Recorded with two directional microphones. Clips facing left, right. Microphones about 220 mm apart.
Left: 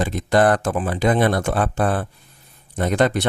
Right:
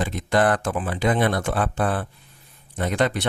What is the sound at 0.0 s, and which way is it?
Speech, 40° left (ahead or behind).